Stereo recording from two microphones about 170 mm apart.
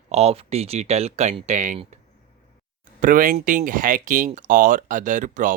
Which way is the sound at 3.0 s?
55° right (ahead or behind).